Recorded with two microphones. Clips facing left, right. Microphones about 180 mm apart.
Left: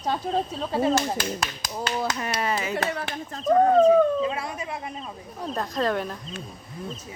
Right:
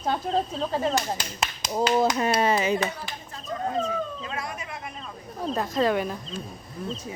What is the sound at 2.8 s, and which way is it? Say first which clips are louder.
Speech: left 2 dB; 65° left (ahead or behind).